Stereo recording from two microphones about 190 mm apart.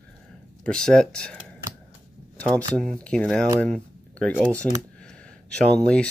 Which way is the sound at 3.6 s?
5° left (ahead or behind).